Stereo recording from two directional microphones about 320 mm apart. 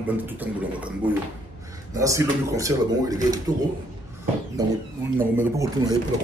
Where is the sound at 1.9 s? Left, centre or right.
Centre.